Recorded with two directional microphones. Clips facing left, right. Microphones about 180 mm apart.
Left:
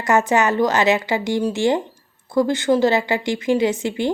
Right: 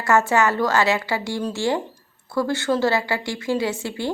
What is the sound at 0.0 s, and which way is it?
A woman's voice, 20° left (ahead or behind).